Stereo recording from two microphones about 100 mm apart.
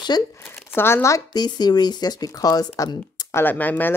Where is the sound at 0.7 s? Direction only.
25° left (ahead or behind).